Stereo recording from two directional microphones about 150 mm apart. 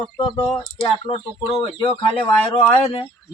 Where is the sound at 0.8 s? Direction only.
35° left (ahead or behind).